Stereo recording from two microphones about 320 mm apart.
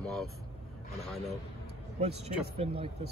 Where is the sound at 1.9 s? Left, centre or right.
Centre.